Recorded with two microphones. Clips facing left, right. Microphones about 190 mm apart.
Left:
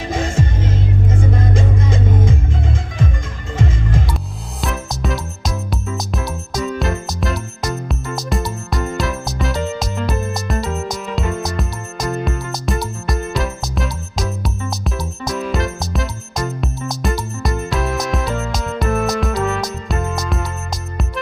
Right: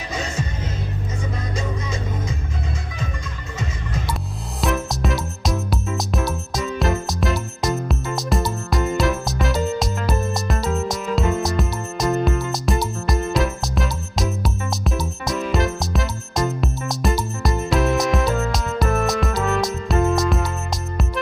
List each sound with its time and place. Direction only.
0.1 s music: 50° left (ahead or behind)
4.6 s music: centre (ahead or behind)